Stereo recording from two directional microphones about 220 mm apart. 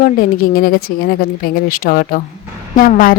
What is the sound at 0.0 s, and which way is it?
Speech, 40° left (ahead or behind).